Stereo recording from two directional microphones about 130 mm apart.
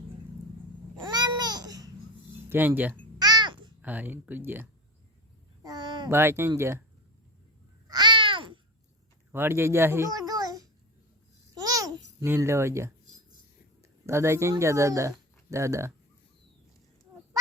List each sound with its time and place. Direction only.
1.0 s babbling: 30° right (ahead or behind)
2.5 s speech: 15° right (ahead or behind)
3.2 s babbling: 30° right (ahead or behind)
3.8 s speech: 15° right (ahead or behind)
5.6 s a sound: 35° right (ahead or behind)
6.1 s speech: 20° right (ahead or behind)
7.9 s babbling: 35° right (ahead or behind)
9.3 s a child's voice: 20° right (ahead or behind)
11.6 s babbling: 25° right (ahead or behind)
14.1 s speech: 20° right (ahead or behind)